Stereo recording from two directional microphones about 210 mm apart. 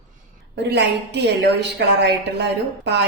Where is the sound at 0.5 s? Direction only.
55° right (ahead or behind).